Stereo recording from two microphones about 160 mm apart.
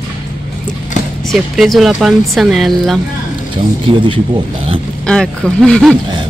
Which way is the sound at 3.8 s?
30° right (ahead or behind).